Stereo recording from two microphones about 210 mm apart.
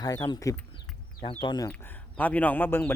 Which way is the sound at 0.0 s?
20° left (ahead or behind).